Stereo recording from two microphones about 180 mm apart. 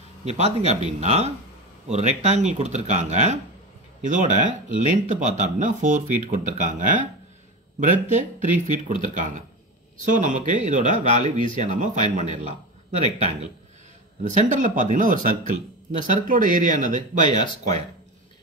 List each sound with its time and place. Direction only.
0.2 s speech: 35° right (ahead or behind)
14.2 s speech: 45° right (ahead or behind)